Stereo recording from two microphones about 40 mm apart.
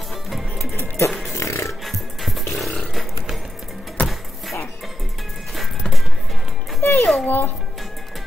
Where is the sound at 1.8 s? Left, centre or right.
Centre.